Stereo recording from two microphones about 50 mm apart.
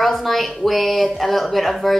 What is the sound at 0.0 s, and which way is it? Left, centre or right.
A woman's voice, centre.